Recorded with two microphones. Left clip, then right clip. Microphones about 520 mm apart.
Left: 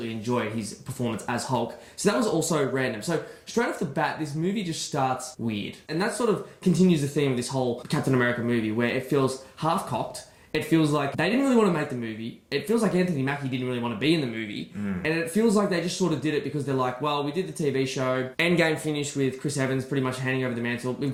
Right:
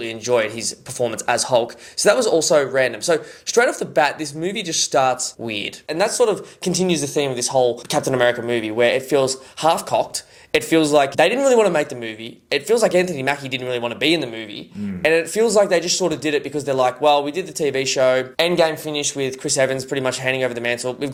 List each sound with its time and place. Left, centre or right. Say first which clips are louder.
1.0 s speech: right 10 dB; right